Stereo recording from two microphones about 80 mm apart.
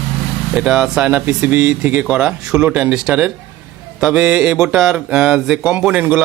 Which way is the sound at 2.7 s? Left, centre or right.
Right.